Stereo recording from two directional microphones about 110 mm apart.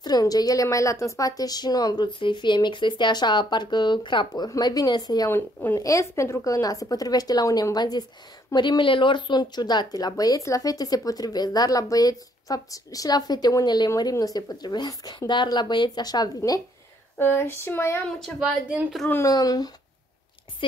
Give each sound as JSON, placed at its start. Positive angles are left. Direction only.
{"t": 0.0, "sound": "speech", "side_deg": 35}
{"t": 5.3, "sound": "a woman's voice", "side_deg": 15}
{"t": 5.8, "sound": "speech", "side_deg": 30}
{"t": 17.2, "sound": "speech", "side_deg": 20}
{"t": 18.4, "sound": "speech", "side_deg": -10}
{"t": 19.2, "sound": "speech", "side_deg": 35}